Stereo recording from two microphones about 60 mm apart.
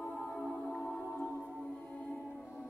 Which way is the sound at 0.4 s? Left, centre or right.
Centre.